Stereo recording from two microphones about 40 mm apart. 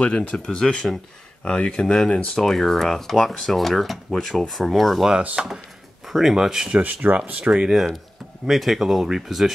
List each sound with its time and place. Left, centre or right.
0.0 s speech: left; by 5.1 s centre
5.3 s speech: centre
6.0 s a sound: centre
6.3 s speech: centre
6.7 s speech: right
7.3 s speech: right
8.5 s speech: centre